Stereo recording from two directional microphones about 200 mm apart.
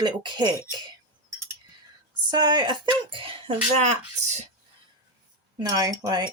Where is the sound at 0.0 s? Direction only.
20° right (ahead or behind).